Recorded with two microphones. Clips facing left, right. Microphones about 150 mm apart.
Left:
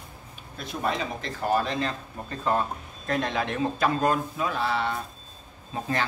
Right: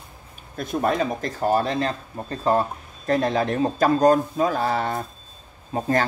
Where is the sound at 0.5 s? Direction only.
50° right (ahead or behind).